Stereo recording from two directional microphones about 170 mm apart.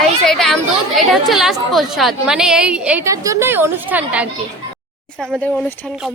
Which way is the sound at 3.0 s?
20° right (ahead or behind).